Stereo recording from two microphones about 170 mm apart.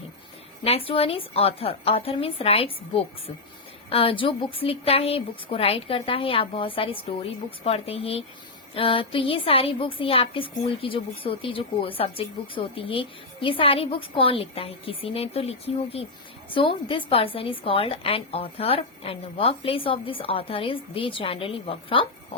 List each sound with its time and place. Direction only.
0.6 s a woman's voice: 35° left (ahead or behind)